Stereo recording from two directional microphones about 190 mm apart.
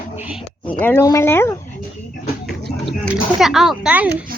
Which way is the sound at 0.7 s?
10° left (ahead or behind).